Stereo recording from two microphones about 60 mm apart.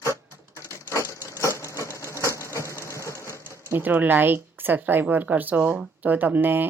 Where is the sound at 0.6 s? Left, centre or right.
Left.